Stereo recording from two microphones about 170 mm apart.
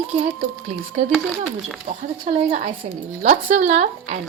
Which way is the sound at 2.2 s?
40° right (ahead or behind).